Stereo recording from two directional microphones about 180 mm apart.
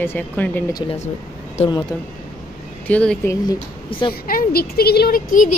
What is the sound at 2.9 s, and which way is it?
Speech, 5° left (ahead or behind).